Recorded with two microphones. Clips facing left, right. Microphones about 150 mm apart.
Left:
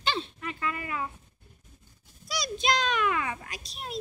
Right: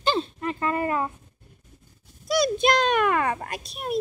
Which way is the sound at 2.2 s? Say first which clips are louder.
Right 8 dB; 55° right (ahead or behind).